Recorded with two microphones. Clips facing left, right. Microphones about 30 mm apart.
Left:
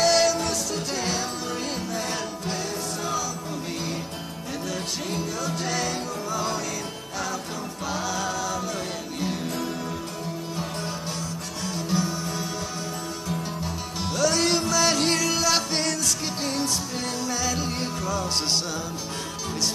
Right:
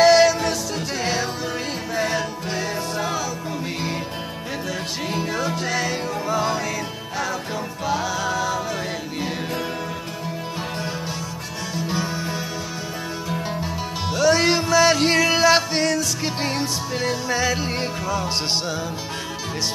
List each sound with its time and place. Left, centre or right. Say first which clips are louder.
0.0 s music: right 6 dB; centre
4.6 s music: right 2 dB; right
5.6 s music: right 4 dB; centre
7.8 s music: right 5 dB; centre
14.0 s music: right 5 dB; centre
15.7 s music: right 5 dB; centre
16.3 s music: right 3 dB; right